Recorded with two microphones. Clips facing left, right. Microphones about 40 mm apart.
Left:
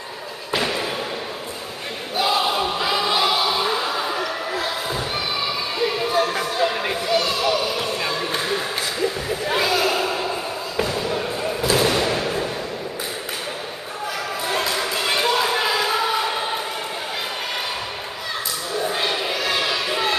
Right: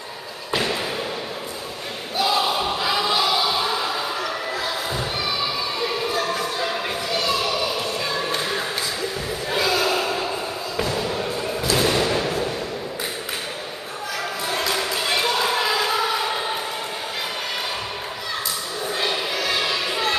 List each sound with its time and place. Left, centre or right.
0.5 s basketball bounce: centre
2.1 s a sound: centre
6.1 s music: left
7.4 s music: left
8.1 s music: centre
9.5 s basketball bounce: centre
10.8 s a sound: centre
14.7 s basketball bounce: centre
18.9 s a sound: centre